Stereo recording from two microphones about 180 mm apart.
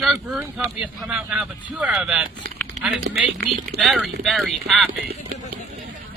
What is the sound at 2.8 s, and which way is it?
Speech, 40° right (ahead or behind).